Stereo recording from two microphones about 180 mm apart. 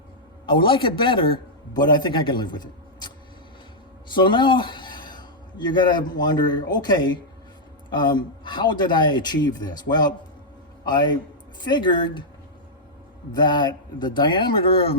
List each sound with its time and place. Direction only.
0.4 s a man's voice: 25° left (ahead or behind)
4.1 s a sound: 25° left (ahead or behind)
6.1 s a man's voice: 25° left (ahead or behind)
13.3 s a man's voice: 25° left (ahead or behind)